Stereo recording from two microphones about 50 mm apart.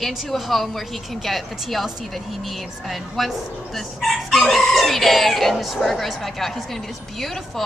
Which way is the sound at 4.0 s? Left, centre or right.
Centre.